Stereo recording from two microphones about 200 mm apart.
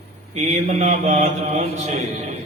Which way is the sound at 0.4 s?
35° right (ahead or behind).